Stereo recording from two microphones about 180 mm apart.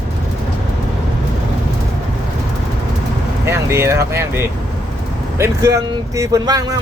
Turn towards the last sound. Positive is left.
turn(degrees=-20)  # may be behind; listen again after turning